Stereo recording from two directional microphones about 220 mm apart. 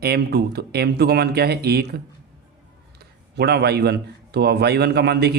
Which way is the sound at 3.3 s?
45° right (ahead or behind).